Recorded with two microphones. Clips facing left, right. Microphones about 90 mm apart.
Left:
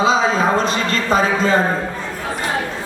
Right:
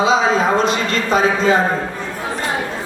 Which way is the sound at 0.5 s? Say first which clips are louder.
Right 1 dB; 40° left (ahead or behind).